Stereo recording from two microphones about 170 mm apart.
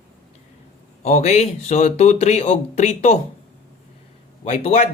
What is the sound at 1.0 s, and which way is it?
Speech, 40° left (ahead or behind).